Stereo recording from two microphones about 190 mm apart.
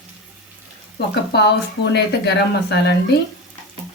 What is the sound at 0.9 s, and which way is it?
Speech, 60° left (ahead or behind).